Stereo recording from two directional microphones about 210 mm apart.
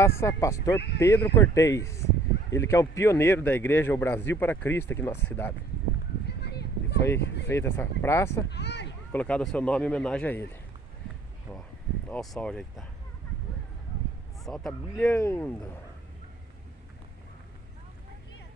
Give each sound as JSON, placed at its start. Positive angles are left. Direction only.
{"t": 0.0, "sound": "speech", "side_deg": 15}
{"t": 6.2, "sound": "a sound", "side_deg": 50}
{"t": 7.4, "sound": "speech", "side_deg": 10}
{"t": 8.5, "sound": "a sound", "side_deg": 55}
{"t": 9.1, "sound": "speech", "side_deg": 5}
{"t": 12.1, "sound": "speech", "side_deg": 5}
{"t": 14.4, "sound": "speech", "side_deg": 0}